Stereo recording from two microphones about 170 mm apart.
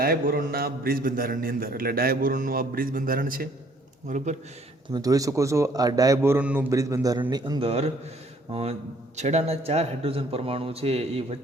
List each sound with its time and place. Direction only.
0.0 s a man's voice: 60° right (ahead or behind)
4.9 s a man's voice: 20° right (ahead or behind)
9.1 s speech: 40° right (ahead or behind)